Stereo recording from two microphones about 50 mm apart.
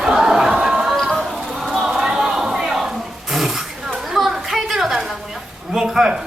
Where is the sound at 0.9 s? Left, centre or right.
Centre.